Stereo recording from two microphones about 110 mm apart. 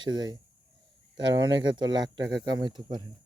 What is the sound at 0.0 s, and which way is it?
Speech, 40° right (ahead or behind).